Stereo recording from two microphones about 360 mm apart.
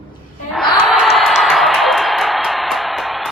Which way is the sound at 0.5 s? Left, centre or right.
Centre.